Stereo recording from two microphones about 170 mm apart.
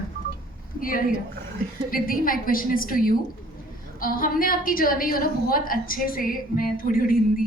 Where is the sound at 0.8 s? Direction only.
55° left (ahead or behind).